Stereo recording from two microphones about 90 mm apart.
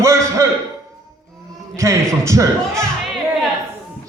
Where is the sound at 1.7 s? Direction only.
35° right (ahead or behind).